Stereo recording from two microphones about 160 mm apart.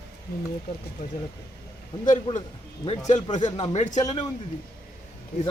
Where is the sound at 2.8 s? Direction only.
30° left (ahead or behind).